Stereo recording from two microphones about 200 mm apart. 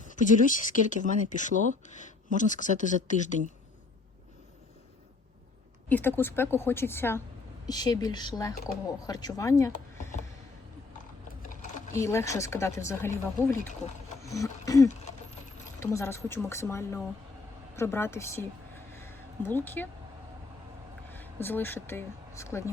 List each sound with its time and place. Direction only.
0.9 s speech: 40° left (ahead or behind)
5.9 s speech: 10° left (ahead or behind)
11.9 s speech: 15° left (ahead or behind)
14.2 s wild animals: 15° left (ahead or behind)
15.8 s speech: 15° left (ahead or behind)
18.9 s a sound: 10° left (ahead or behind)
21.1 s speech: 10° left (ahead or behind)